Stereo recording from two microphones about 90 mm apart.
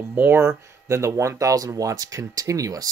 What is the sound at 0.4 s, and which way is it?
Speech, 35° right (ahead or behind).